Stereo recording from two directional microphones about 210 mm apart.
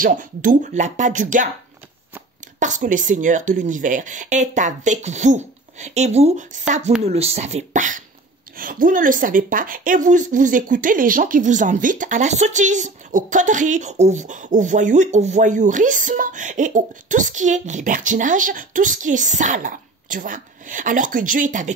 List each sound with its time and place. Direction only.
0.0 s a woman's voice: 40° right (ahead or behind)
2.6 s a woman's voice: 35° right (ahead or behind)